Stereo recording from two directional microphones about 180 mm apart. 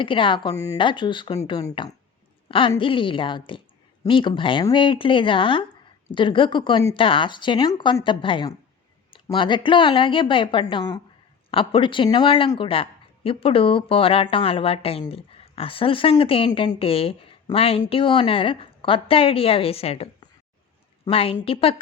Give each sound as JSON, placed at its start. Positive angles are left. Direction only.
{"t": 0.0, "sound": "speech", "side_deg": 30}